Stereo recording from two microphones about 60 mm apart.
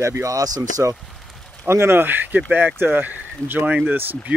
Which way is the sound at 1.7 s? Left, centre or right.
Right.